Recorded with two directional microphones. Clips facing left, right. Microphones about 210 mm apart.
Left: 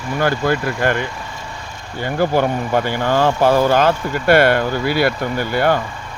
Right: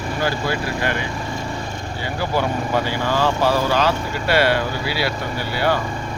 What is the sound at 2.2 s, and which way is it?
Speech, 50° left (ahead or behind).